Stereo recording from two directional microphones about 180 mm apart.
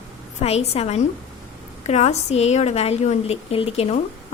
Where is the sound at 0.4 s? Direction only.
35° left (ahead or behind).